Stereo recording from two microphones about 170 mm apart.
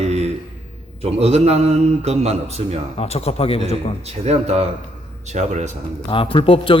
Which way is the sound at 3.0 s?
35° left (ahead or behind).